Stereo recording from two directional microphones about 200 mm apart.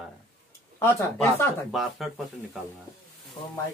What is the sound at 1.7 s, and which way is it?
Speech, centre (ahead or behind).